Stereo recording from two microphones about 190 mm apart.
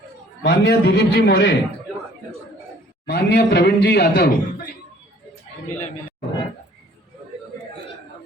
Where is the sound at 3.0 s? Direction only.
60° left (ahead or behind).